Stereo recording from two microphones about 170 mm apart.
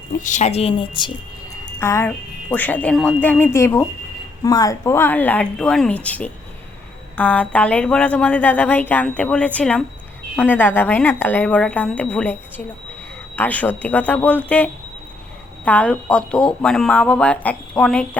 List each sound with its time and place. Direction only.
0.2 s speech: 45° left (ahead or behind); by 1.1 s 30° left (ahead or behind)
1.8 s speech: 15° left (ahead or behind)